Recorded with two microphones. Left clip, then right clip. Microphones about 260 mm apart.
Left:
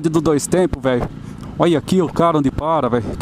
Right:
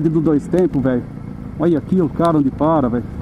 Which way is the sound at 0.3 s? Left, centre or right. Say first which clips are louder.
Left 1 dB; left.